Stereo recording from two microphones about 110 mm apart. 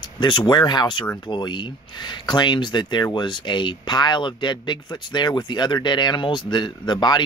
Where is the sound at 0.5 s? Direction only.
40° left (ahead or behind).